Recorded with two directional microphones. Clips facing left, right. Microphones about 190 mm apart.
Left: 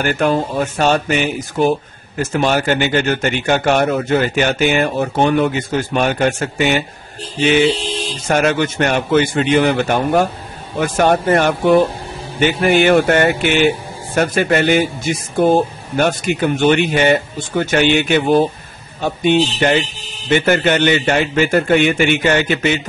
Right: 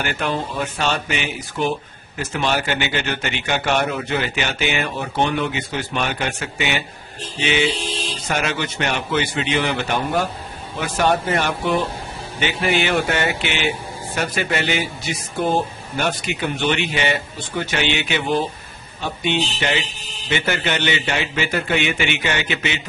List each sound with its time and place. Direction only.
0.0 s speech: 45° left (ahead or behind)